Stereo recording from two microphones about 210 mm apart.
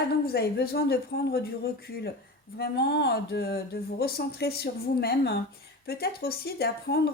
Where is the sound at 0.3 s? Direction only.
50° left (ahead or behind).